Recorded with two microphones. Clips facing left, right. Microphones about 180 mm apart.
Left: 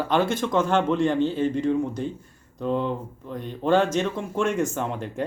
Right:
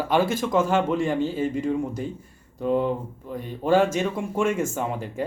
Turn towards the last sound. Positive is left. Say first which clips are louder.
# even
turn(degrees=-5)  # may be behind; listen again after turning